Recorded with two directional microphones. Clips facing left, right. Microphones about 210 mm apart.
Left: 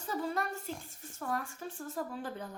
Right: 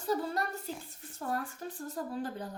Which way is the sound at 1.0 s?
35° right (ahead or behind).